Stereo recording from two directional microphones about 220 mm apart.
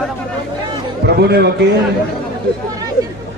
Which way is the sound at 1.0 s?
45° right (ahead or behind).